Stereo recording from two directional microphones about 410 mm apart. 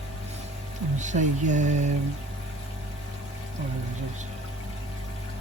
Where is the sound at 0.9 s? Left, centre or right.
Centre.